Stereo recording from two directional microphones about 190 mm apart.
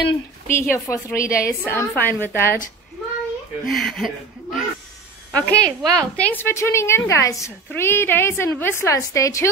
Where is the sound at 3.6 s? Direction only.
Centre (ahead or behind).